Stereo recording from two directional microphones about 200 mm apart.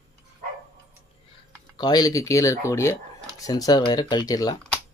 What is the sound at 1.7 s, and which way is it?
Speech, 20° left (ahead or behind).